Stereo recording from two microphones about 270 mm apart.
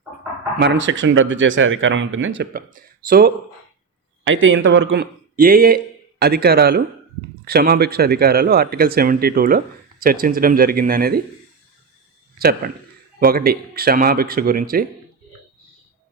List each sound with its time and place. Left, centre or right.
0.6 s speech: right
4.2 s a man's voice: right
12.6 s speech: right